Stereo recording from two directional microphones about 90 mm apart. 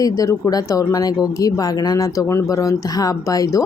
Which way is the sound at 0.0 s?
40° left (ahead or behind).